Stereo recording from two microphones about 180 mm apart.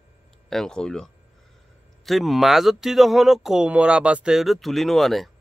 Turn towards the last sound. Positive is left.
turn(degrees=0)  # may be behind; listen again after turning